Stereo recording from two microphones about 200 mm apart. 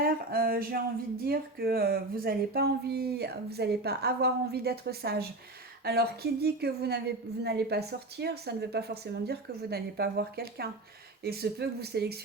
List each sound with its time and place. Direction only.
0.0 s speech: 50° right (ahead or behind)